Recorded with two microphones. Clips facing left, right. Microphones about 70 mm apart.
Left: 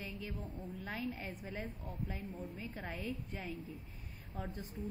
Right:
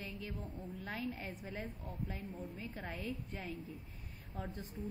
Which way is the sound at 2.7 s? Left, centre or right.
Centre.